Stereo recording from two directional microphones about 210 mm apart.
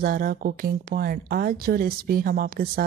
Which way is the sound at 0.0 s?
45° right (ahead or behind).